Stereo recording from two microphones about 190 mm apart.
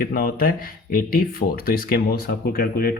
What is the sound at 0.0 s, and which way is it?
Speech, 50° left (ahead or behind).